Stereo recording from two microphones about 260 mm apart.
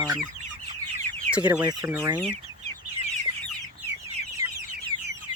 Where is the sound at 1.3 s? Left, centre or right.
Centre.